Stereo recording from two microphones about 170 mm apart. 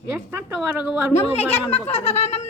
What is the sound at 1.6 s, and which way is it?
Speech, 40° left (ahead or behind).